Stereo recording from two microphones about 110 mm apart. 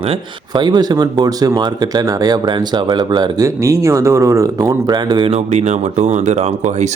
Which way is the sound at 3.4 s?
30° right (ahead or behind).